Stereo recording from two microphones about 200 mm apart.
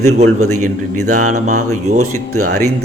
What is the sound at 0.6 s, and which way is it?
Speech, 40° right (ahead or behind).